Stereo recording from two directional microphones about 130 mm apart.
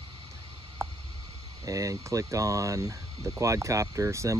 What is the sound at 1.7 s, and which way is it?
Speech, 25° right (ahead or behind).